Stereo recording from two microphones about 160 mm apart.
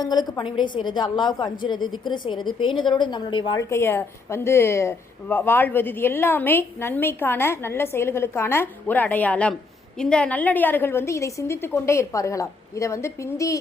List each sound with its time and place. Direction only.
0.0 s a woman's voice: 25° left (ahead or behind)
3.7 s speech: 15° left (ahead or behind)